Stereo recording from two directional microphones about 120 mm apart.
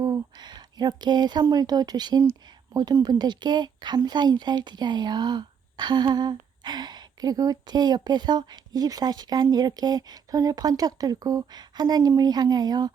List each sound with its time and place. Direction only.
0.0 s speech: 35° right (ahead or behind)